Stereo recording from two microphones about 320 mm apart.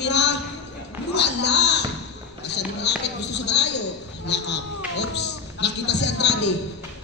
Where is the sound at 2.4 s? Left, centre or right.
Left.